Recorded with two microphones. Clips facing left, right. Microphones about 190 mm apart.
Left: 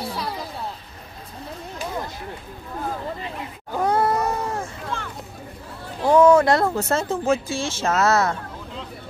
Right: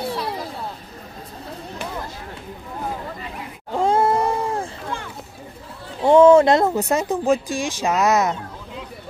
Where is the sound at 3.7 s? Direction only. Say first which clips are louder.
Right 2 dB; 25° right (ahead or behind).